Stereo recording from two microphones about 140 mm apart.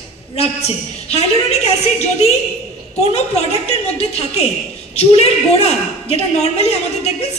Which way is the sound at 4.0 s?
50° left (ahead or behind).